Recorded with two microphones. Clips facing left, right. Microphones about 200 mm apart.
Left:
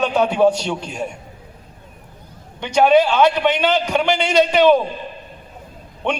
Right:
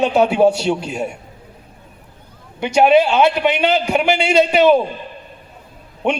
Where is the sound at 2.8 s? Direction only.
25° right (ahead or behind).